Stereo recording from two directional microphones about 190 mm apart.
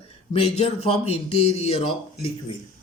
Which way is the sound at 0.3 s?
35° left (ahead or behind).